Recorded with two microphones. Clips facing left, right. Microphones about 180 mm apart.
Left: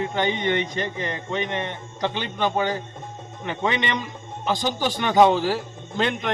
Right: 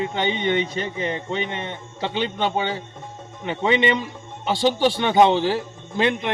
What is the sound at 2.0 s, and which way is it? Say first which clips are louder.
A man's voice: right 1 dB; 20° right (ahead or behind).